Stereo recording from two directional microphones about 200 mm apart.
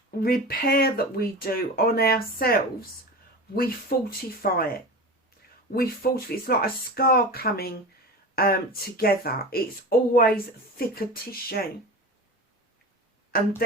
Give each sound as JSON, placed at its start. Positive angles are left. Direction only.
{"t": 0.2, "sound": "speech", "side_deg": 50}
{"t": 9.0, "sound": "speech", "side_deg": 50}
{"t": 13.3, "sound": "speech", "side_deg": 50}